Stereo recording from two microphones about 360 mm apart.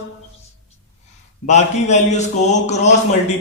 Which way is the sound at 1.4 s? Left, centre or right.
Centre.